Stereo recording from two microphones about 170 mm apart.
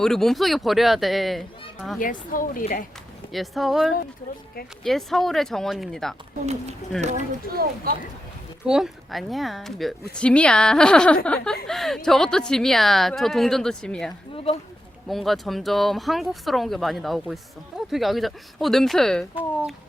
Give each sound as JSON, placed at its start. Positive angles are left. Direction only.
{"t": 0.0, "sound": "a woman's voice", "side_deg": 0}
{"t": 2.0, "sound": "speech", "side_deg": 55}
{"t": 3.3, "sound": "a woman's voice", "side_deg": 0}
{"t": 6.4, "sound": "speech", "side_deg": -40}
{"t": 7.5, "sound": "speech", "side_deg": -65}
{"t": 8.6, "sound": "a woman's voice", "side_deg": -5}